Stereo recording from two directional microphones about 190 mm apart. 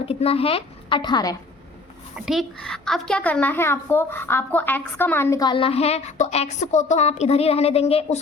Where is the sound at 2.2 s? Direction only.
Centre (ahead or behind).